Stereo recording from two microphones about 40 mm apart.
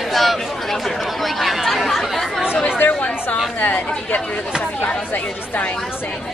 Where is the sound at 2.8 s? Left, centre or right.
Left.